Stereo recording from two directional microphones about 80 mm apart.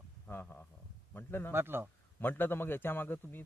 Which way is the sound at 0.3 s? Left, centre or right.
Left.